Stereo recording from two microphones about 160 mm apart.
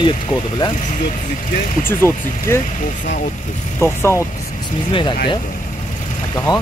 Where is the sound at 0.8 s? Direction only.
50° left (ahead or behind).